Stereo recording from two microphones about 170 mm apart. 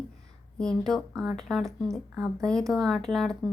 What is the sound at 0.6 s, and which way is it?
A woman's voice, 5° left (ahead or behind).